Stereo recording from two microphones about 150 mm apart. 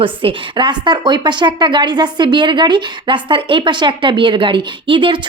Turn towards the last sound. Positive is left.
turn(degrees=-35)  # may be behind; listen again after turning